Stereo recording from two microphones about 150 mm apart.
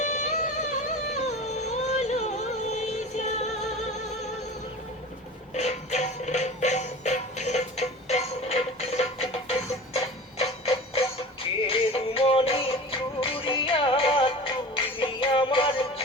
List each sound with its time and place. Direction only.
0.0 s music: 50° left (ahead or behind)
5.5 s music: 50° left (ahead or behind)